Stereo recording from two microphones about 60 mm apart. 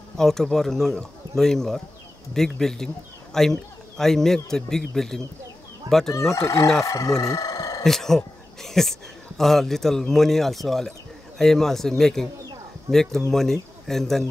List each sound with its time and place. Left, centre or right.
0.2 s a man's voice: centre
6.3 s speech: left
7.8 s a man's voice: centre